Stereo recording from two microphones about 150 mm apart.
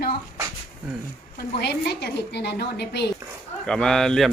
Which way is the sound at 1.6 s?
90° left.